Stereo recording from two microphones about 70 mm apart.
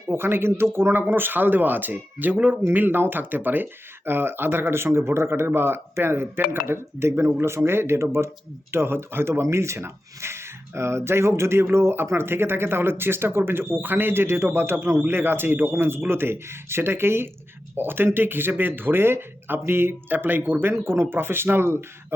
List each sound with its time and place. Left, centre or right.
0.1 s speech: right